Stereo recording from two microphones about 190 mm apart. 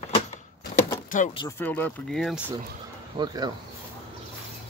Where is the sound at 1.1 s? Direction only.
45° left (ahead or behind).